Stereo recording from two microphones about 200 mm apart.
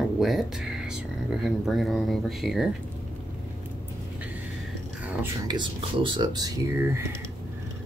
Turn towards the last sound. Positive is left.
turn(degrees=-20)  # may be behind; listen again after turning